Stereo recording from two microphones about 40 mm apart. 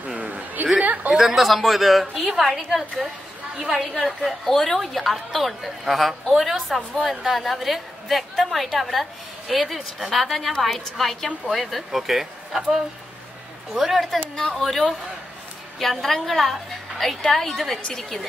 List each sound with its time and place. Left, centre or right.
0.2 s a sound: right
1.1 s a woman's voice: centre
13.7 s a woman's voice: centre